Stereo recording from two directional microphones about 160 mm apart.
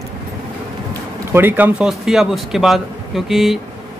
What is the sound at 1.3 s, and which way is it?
Speech, 15° right (ahead or behind).